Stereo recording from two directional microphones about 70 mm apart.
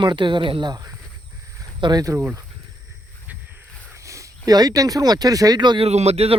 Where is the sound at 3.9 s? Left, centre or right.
Right.